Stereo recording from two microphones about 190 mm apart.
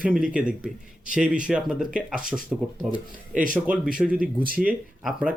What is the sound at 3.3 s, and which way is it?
Speech, 45° right (ahead or behind).